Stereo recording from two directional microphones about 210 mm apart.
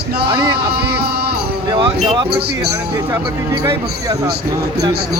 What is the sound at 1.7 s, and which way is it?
Speech, 25° right (ahead or behind).